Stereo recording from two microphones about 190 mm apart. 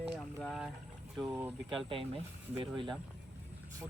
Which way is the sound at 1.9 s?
30° right (ahead or behind).